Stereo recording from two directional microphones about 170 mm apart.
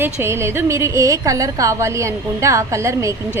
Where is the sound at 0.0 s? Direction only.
15° right (ahead or behind).